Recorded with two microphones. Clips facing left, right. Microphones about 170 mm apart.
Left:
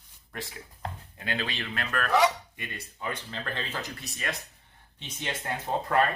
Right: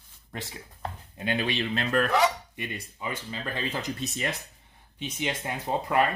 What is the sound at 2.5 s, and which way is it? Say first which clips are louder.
Speech: right 4 dB; 10° right (ahead or behind).